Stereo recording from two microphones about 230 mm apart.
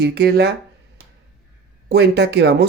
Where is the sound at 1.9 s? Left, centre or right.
Right.